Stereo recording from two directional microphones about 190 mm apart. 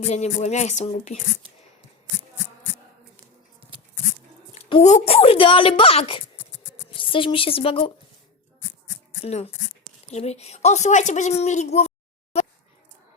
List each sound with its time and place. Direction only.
0.0 s speech: 35° left (ahead or behind)
4.5 s a woman's voice: 35° left (ahead or behind)
9.2 s speech: 35° left (ahead or behind)